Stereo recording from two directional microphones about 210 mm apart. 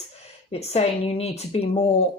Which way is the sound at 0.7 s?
30° left (ahead or behind).